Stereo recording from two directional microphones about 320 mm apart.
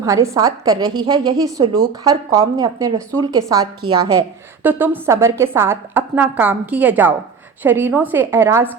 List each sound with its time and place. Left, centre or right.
0.0 s a woman's voice: centre